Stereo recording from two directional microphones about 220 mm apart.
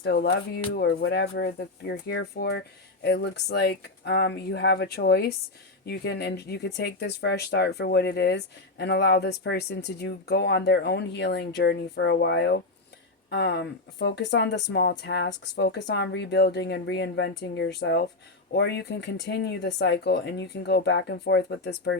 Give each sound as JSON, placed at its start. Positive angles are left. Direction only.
{"t": 0.0, "sound": "speech", "side_deg": 50}